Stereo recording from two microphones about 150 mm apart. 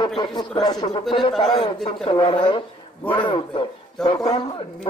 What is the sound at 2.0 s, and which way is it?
Speech, 35° left (ahead or behind).